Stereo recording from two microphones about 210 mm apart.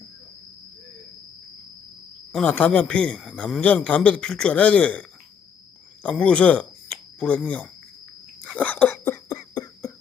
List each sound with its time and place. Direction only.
2.3 s a man's voice: 5° left (ahead or behind)
8.4 s cough: 5° left (ahead or behind)
9.4 s a sound: 20° left (ahead or behind)